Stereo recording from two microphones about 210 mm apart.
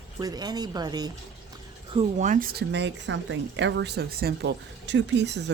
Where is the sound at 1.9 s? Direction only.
35° right (ahead or behind); by 5.4 s 55° right (ahead or behind).